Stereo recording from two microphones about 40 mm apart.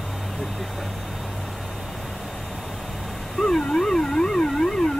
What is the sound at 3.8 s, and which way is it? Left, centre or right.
Theremin, centre.